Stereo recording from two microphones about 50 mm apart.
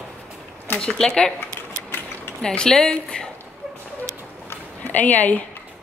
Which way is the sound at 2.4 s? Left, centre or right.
Centre.